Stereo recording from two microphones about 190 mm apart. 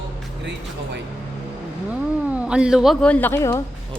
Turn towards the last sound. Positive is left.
turn(degrees=15)  # may be behind; listen again after turning